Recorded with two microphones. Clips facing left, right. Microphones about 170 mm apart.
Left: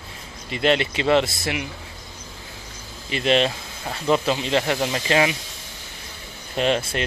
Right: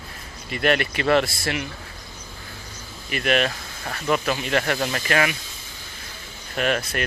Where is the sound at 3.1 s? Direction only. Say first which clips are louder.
Left 2 dB; 25° left (ahead or behind).